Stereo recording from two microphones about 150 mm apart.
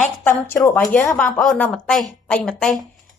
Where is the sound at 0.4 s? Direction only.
15° left (ahead or behind).